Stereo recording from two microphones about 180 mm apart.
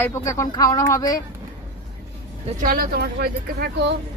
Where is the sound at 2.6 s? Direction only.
55° right (ahead or behind).